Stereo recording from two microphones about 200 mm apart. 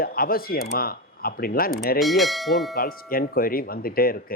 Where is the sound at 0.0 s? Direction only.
50° left (ahead or behind).